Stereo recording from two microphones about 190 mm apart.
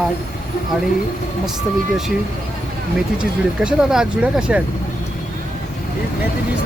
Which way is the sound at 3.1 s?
5° right (ahead or behind).